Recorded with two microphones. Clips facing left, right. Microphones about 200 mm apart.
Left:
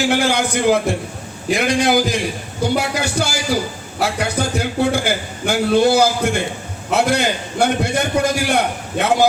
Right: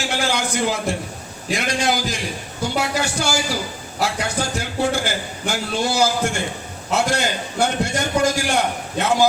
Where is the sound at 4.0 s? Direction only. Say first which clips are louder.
Left 3 dB; 60° left (ahead or behind).